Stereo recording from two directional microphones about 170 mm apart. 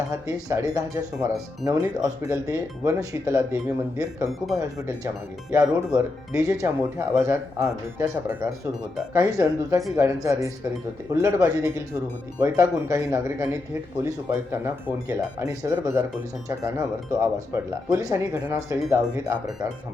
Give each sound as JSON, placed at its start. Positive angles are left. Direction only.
{"t": 0.1, "sound": "speech", "side_deg": -20}